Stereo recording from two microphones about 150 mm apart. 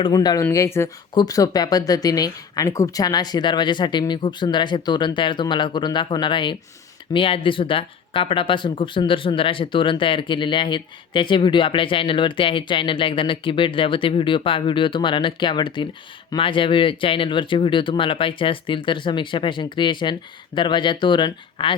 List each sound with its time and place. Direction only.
0.0 s speech: 25° left (ahead or behind)